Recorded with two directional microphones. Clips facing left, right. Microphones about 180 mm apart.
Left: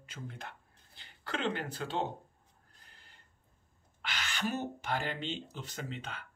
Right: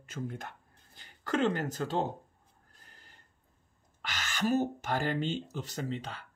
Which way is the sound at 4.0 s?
45° right (ahead or behind).